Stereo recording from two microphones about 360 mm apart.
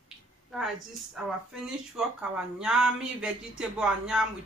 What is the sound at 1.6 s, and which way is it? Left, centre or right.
Speech, centre.